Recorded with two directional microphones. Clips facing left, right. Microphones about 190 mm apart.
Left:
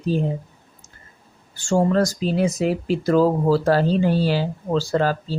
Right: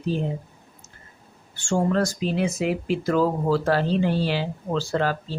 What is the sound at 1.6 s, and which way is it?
Speech, 35° left (ahead or behind).